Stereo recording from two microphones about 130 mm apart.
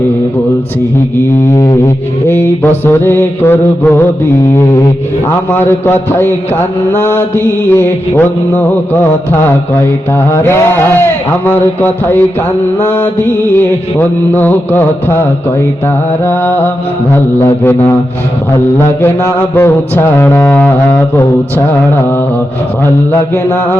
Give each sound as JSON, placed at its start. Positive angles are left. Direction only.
{"t": 1.5, "sound": "mantra", "side_deg": 30}
{"t": 2.2, "sound": "mantra", "side_deg": 15}
{"t": 23.3, "sound": "mantra", "side_deg": 20}